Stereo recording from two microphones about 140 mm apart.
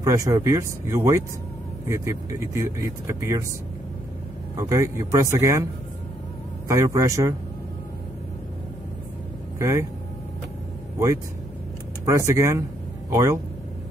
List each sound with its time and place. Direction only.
0.0 s speech: 20° right (ahead or behind)
4.6 s speech: 25° right (ahead or behind)
6.7 s speech: 20° right (ahead or behind)
9.6 s speech: 20° right (ahead or behind)
12.1 s speech: 20° right (ahead or behind)